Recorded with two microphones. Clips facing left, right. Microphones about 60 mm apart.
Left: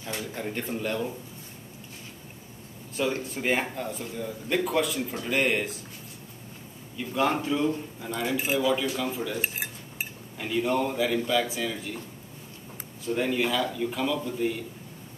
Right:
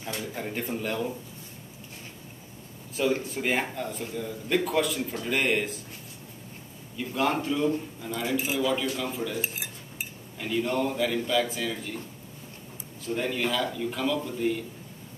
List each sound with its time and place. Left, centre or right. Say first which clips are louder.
0.3 s a man's voice: even; centre
3.0 s a man's voice: right 2 dB; centre
7.0 s a man's voice: left 1 dB; centre
9.4 s cutlery: left 2 dB; left
10.4 s a man's voice: left 1 dB; centre
13.1 s a man's voice: left 2 dB; centre